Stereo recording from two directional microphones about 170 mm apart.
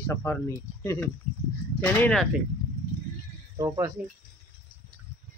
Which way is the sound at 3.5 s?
20° right (ahead or behind).